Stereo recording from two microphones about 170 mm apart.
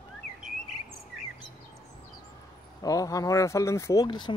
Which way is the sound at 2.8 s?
20° left (ahead or behind).